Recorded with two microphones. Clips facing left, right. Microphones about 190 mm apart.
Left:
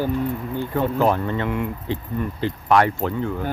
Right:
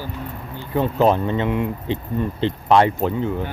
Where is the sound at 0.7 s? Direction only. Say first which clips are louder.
Right 3 dB; 20° right (ahead or behind).